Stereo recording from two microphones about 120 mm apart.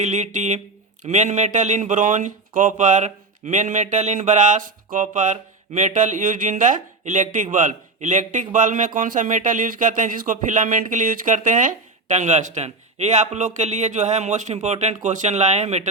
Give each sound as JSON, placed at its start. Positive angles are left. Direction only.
{"t": 0.0, "sound": "speech", "side_deg": -80}